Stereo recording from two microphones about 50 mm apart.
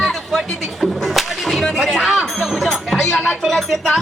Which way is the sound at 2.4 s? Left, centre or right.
Centre.